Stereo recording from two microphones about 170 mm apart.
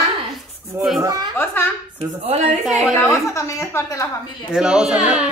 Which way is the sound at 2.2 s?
40° right (ahead or behind).